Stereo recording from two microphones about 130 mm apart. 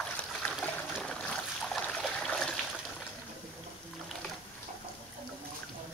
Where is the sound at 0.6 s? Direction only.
5° left (ahead or behind).